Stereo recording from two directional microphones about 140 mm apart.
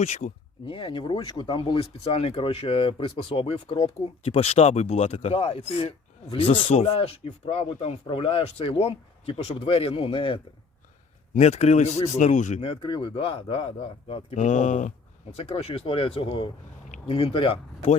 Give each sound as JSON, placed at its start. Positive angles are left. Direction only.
{"t": 0.0, "sound": "speech", "side_deg": 60}
{"t": 0.7, "sound": "speech", "side_deg": 35}
{"t": 11.3, "sound": "speech", "side_deg": 50}
{"t": 12.8, "sound": "speech", "side_deg": 35}
{"t": 14.3, "sound": "speech", "side_deg": 60}